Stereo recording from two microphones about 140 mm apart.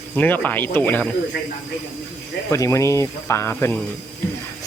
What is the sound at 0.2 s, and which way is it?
Speech, 10° left (ahead or behind).